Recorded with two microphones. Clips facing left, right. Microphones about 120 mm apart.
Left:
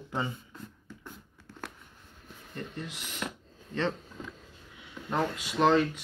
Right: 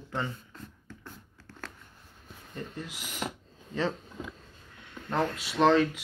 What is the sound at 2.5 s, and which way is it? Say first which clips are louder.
Speech: even; 5° right (ahead or behind).